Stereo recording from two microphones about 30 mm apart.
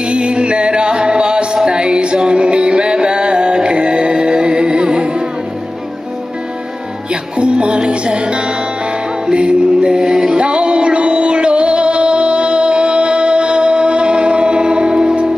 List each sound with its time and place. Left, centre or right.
0.0 s music: right
7.3 s music: right
9.3 s mantra: right
10.3 s music: right